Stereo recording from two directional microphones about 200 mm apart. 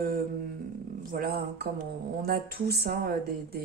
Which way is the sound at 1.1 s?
50° right (ahead or behind).